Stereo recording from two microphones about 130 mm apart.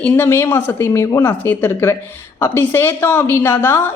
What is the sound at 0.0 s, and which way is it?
A woman's voice, 20° left (ahead or behind).